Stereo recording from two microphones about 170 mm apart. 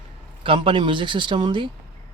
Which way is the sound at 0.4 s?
30° right (ahead or behind).